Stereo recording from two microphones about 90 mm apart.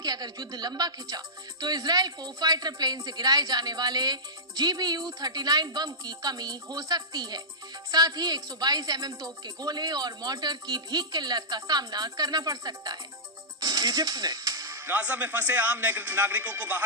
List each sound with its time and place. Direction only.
0.0 s a woman's voice: 45° right (ahead or behind)
13.6 s music: 45° right (ahead or behind)
14.8 s a man's voice: 20° right (ahead or behind)